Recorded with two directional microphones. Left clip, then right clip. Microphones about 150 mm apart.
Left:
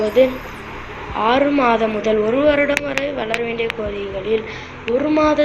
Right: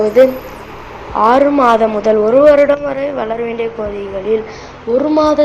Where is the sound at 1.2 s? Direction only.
30° right (ahead or behind).